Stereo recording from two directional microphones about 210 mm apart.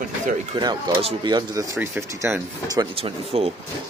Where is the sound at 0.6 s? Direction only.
20° right (ahead or behind).